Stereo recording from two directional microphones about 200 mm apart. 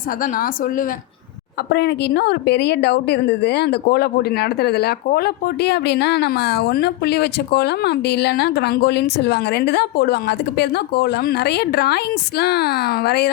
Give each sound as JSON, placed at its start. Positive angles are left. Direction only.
{"t": 0.2, "sound": "speech", "side_deg": 45}
{"t": 1.7, "sound": "a woman's voice", "side_deg": 55}